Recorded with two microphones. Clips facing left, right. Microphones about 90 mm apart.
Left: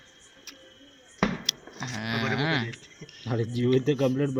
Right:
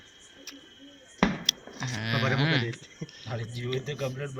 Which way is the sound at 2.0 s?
25° left (ahead or behind).